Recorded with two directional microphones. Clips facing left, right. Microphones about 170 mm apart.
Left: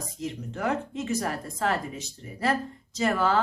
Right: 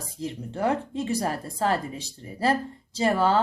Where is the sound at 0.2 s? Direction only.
30° right (ahead or behind).